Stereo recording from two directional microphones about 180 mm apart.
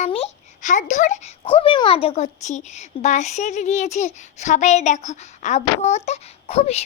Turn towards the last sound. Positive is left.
turn(degrees=35)  # may be behind; listen again after turning